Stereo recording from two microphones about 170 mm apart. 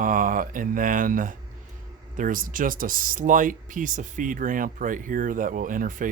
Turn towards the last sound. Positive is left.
turn(degrees=-50)  # may be behind; listen again after turning